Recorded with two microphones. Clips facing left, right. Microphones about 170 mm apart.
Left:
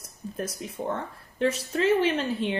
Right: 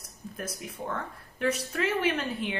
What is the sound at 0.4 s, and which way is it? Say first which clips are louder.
A woman's voice: left 5 dB; 30° left (ahead or behind).